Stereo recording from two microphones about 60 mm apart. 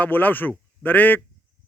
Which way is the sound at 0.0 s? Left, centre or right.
Left.